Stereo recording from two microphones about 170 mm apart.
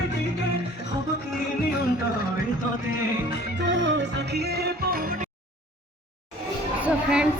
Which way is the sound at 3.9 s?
70° right (ahead or behind).